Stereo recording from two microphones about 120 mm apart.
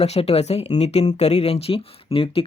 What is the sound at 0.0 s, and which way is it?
Speech, 60° left (ahead or behind).